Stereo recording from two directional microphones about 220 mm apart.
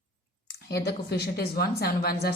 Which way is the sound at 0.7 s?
45° left (ahead or behind).